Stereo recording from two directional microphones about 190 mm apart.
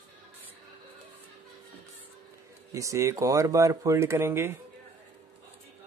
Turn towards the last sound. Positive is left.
turn(degrees=-10)  # may be behind; listen again after turning